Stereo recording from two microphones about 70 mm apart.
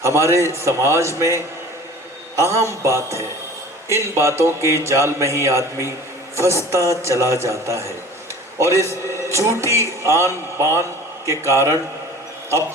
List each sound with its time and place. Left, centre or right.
0.0 s speech: right
2.4 s speech: right